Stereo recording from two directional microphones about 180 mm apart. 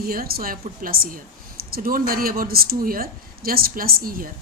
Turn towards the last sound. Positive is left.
turn(degrees=-50)  # may be behind; listen again after turning